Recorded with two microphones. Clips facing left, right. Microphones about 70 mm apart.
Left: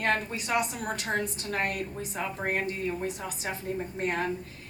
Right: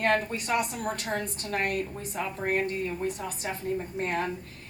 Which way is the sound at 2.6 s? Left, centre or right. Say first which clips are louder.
Right 1 dB; right.